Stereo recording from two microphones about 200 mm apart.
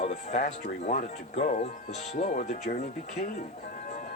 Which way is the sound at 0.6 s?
40° left (ahead or behind).